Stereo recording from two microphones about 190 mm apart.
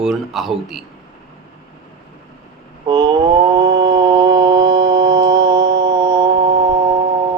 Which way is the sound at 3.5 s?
20° right (ahead or behind).